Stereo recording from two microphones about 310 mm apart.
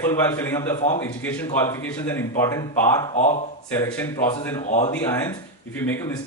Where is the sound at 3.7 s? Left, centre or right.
Centre.